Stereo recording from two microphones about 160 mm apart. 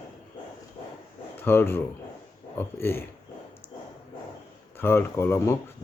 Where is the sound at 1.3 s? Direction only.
15° left (ahead or behind).